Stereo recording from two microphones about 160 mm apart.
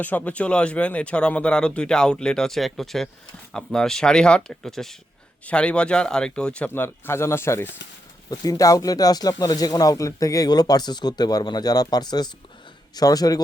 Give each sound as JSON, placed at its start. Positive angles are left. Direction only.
{"t": 0.0, "sound": "speech", "side_deg": 10}